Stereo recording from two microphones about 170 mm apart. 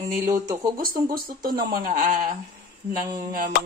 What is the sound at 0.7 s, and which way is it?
Speech, 60° right (ahead or behind).